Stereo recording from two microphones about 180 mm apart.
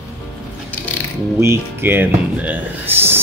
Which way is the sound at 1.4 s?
15° right (ahead or behind).